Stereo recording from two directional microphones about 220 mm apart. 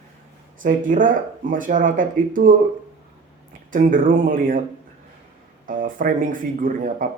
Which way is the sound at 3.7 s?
40° right (ahead or behind).